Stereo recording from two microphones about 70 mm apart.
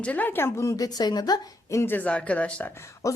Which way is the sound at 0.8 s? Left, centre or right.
Left.